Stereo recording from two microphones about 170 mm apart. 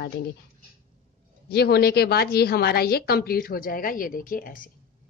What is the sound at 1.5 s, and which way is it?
A woman's voice, 70° left (ahead or behind).